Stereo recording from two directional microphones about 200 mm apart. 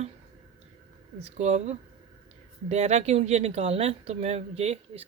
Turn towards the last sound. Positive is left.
turn(degrees=-30)  # may be behind; listen again after turning